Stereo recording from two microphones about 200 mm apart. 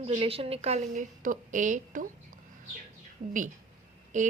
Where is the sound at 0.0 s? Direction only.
30° right (ahead or behind).